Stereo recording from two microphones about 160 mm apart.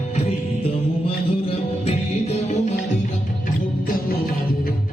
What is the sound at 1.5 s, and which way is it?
Music, 40° left (ahead or behind).